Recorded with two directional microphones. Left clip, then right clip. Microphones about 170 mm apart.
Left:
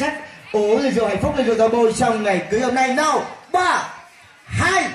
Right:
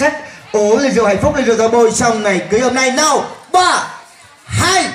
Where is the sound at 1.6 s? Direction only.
25° left (ahead or behind).